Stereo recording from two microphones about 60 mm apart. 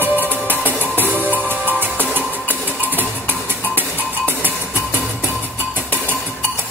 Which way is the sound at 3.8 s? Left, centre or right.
Right.